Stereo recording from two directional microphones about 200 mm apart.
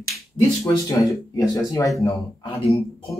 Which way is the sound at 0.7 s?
20° left (ahead or behind).